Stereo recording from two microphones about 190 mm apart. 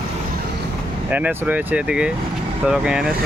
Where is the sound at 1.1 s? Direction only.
10° right (ahead or behind).